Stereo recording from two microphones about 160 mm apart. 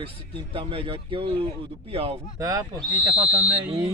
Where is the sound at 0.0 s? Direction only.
35° right (ahead or behind).